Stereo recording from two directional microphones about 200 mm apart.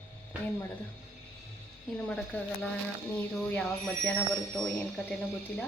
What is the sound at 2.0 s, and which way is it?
Speech, 5° left (ahead or behind).